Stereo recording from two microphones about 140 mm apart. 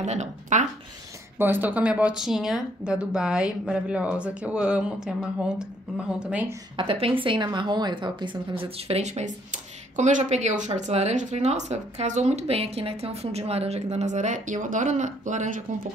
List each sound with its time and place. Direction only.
0.0 s speech: 55° right (ahead or behind)
1.4 s speech: 15° right (ahead or behind)
6.8 s a woman's voice: 40° right (ahead or behind); by 15.6 s 60° right (ahead or behind)